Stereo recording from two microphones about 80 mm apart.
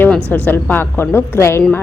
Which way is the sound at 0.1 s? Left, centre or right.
Centre.